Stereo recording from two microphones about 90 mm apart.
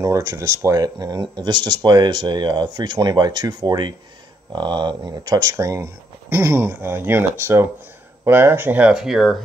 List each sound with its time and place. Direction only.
0.0 s speech: 35° right (ahead or behind)
0.8 s speech: 50° right (ahead or behind)
6.3 s speech: 25° right (ahead or behind)
8.9 s speech: 5° right (ahead or behind)